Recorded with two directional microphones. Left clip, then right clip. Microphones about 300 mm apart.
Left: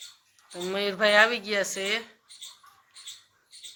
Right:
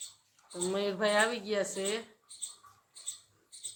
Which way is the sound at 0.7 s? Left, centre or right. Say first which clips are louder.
Left 7 dB; centre.